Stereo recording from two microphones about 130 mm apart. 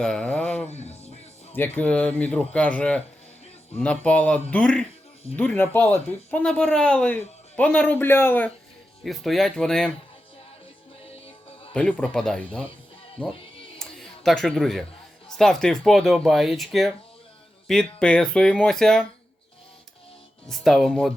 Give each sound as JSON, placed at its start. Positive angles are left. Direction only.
{"t": 0.0, "sound": "speech", "side_deg": 5}
{"t": 0.7, "sound": "speech", "side_deg": 55}
{"t": 1.5, "sound": "speech", "side_deg": 15}
{"t": 9.0, "sound": "speech", "side_deg": 0}
{"t": 11.7, "sound": "speech", "side_deg": 10}
{"t": 13.7, "sound": "a sound", "side_deg": 0}
{"t": 15.4, "sound": "speech", "side_deg": 5}
{"t": 20.5, "sound": "speech", "side_deg": 0}